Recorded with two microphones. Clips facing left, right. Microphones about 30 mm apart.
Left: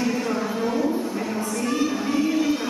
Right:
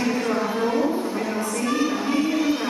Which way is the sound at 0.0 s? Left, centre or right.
Centre.